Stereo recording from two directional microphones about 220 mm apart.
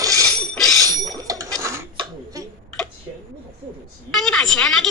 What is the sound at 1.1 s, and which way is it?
Bicycle bell, 15° right (ahead or behind).